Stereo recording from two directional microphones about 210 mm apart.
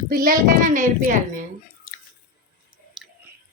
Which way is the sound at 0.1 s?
40° right (ahead or behind).